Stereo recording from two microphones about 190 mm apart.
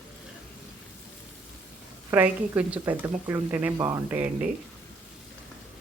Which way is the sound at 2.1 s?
10° right (ahead or behind).